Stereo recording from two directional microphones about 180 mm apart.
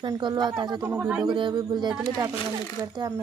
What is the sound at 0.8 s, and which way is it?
Speech, 10° right (ahead or behind).